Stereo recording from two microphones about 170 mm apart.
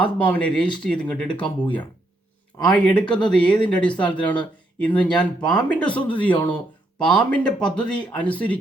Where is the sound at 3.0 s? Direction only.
25° left (ahead or behind).